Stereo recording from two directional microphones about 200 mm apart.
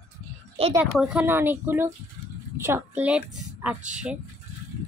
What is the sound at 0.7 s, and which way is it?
A child's voice, 5° right (ahead or behind).